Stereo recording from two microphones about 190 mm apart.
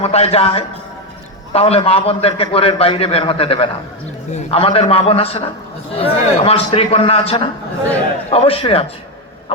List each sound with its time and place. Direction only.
0.0 s a man's voice: 30° left (ahead or behind)